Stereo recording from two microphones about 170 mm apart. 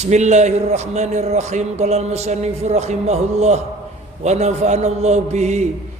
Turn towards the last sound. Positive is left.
turn(degrees=-40)  # may be behind; listen again after turning